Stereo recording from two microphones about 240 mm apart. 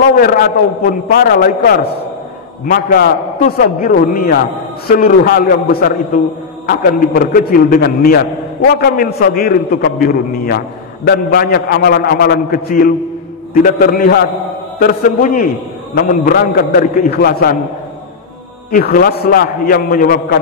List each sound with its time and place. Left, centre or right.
0.1 s a man's voice: left
18.7 s a man's voice: left